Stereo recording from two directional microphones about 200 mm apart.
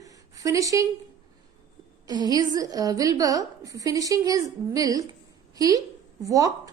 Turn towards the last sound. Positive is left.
turn(degrees=-15)  # may be behind; listen again after turning